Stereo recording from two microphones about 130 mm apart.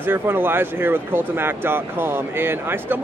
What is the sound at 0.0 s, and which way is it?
Speech, 15° right (ahead or behind).